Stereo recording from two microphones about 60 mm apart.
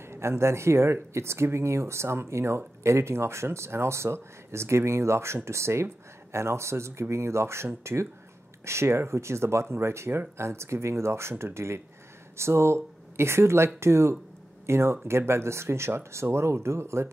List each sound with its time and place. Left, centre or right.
0.0 s speech: right